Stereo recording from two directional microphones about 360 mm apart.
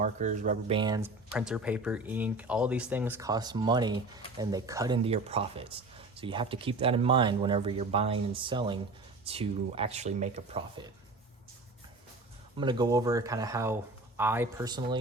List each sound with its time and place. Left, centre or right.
0.0 s speech: right
12.5 s speech: centre